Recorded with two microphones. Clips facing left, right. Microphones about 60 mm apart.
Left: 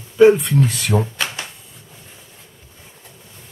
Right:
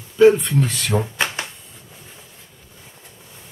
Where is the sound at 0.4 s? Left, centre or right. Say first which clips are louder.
Left 3 dB; centre.